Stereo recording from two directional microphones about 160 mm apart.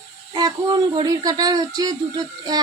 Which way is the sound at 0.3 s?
25° right (ahead or behind).